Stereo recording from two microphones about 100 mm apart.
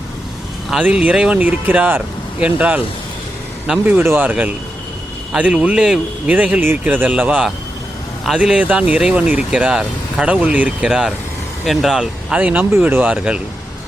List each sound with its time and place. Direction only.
0.8 s speech: 15° right (ahead or behind)
3.8 s speech: 20° right (ahead or behind)